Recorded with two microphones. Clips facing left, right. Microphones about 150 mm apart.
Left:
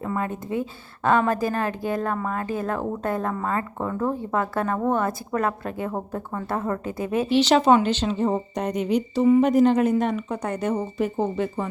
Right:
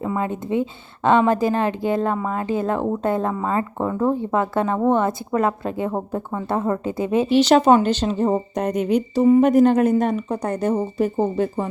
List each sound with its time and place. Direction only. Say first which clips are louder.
0.0 s speech: right 3 dB; 20° right (ahead or behind)
7.3 s a woman's voice: right 3 dB; 45° right (ahead or behind)